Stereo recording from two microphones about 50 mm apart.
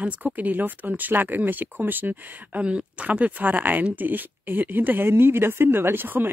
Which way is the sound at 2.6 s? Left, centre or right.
Right.